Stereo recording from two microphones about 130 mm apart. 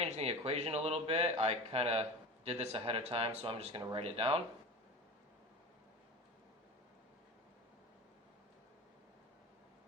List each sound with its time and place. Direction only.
0.0 s a man's voice: 55° right (ahead or behind)